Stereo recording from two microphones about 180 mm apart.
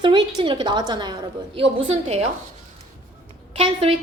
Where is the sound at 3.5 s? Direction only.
30° right (ahead or behind).